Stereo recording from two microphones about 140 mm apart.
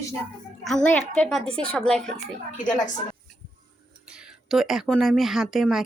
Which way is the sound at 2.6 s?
65° left (ahead or behind).